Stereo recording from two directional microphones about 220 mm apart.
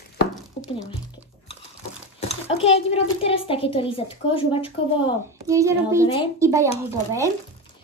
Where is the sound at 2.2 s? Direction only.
30° left (ahead or behind).